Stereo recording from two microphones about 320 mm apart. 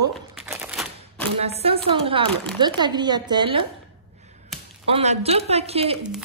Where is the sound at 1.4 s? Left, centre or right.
Centre.